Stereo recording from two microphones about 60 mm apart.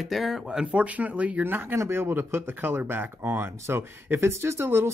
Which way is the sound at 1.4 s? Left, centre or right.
Right.